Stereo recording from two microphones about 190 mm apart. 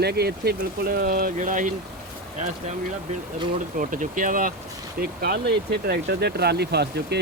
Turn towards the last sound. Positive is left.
turn(degrees=-60)  # may be behind; listen again after turning